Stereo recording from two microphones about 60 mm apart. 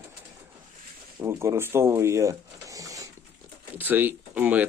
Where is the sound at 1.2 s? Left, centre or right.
Right.